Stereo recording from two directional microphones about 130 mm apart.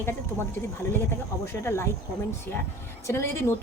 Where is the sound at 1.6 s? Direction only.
20° left (ahead or behind).